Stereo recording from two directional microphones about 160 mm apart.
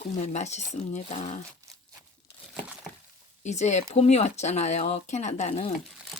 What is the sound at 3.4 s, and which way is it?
Speech, 45° left (ahead or behind).